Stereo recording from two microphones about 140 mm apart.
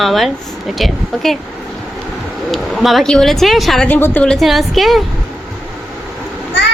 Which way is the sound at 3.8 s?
15° left (ahead or behind).